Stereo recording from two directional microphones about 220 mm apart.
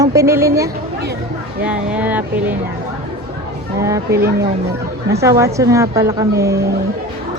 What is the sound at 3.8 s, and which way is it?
A woman's voice, 15° right (ahead or behind).